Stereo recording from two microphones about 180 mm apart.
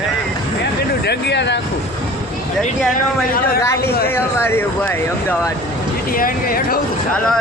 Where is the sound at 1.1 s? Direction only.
70° left (ahead or behind).